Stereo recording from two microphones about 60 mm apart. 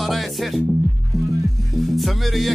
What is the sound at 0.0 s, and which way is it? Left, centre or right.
Music, centre.